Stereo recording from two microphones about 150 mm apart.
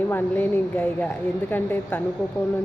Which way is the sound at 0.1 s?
10° left (ahead or behind).